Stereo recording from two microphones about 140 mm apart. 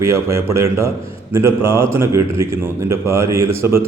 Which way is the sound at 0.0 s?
20° right (ahead or behind).